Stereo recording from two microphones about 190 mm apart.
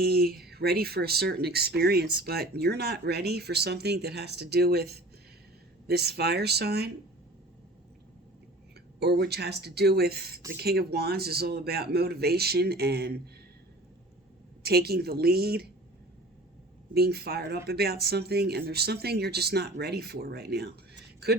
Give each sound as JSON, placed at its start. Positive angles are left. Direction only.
{"t": 0.0, "sound": "speech", "side_deg": -55}
{"t": 9.0, "sound": "speech", "side_deg": -55}
{"t": 14.6, "sound": "speech", "side_deg": -55}
{"t": 16.9, "sound": "speech", "side_deg": -55}